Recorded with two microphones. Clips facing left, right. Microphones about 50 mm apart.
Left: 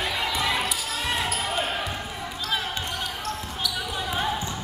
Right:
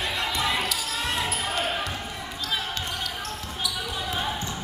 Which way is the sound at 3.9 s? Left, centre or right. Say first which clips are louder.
Left 4 dB; centre.